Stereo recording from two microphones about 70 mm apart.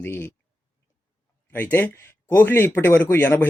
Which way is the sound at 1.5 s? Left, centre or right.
Left.